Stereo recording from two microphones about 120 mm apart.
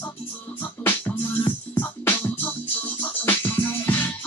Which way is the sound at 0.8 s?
15° left (ahead or behind).